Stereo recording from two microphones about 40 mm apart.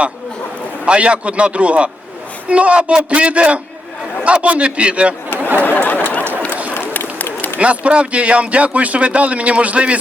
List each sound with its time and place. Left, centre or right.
0.9 s speech: right
5.8 s chatter: left
7.2 s a sound: left
7.6 s speech: right